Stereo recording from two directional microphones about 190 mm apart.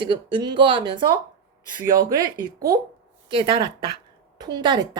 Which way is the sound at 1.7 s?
45° right (ahead or behind).